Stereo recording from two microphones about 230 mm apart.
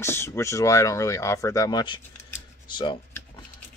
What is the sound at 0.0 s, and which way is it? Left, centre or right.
Speech, centre.